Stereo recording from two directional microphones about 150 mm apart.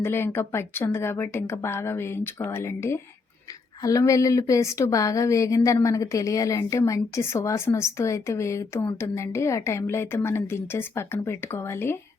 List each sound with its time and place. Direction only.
0.0 s speech: 15° left (ahead or behind)